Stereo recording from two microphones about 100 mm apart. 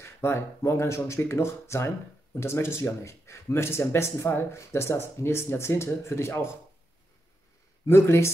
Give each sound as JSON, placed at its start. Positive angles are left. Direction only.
{"t": 0.0, "sound": "speech", "side_deg": 25}
{"t": 7.8, "sound": "speech", "side_deg": 25}